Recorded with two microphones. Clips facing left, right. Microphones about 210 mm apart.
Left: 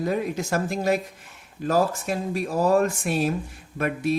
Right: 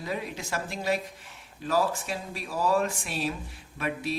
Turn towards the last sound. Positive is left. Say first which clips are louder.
# left 7 dB
turn(degrees=50)  # may be behind; listen again after turning